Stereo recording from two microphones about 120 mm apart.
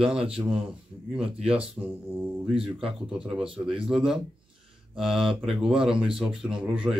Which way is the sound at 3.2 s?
5° right (ahead or behind).